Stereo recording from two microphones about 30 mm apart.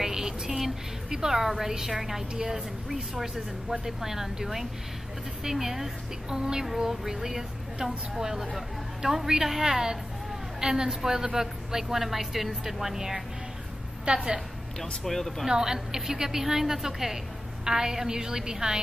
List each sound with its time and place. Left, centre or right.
0.0 s music: centre
1.1 s a woman's voice: centre
6.3 s a woman's voice: right
14.0 s a woman's voice: right
15.0 s speech: centre
15.4 s a woman's voice: centre